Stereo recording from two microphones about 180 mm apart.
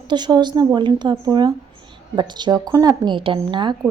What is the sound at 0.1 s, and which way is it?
A woman's voice, 25° right (ahead or behind).